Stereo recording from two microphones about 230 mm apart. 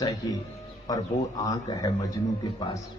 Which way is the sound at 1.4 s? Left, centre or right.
Centre.